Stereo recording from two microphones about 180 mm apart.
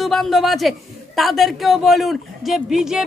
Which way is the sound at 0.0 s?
Centre (ahead or behind).